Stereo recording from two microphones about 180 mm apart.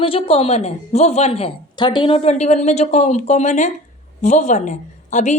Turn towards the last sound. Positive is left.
turn(degrees=40)  # may be behind; listen again after turning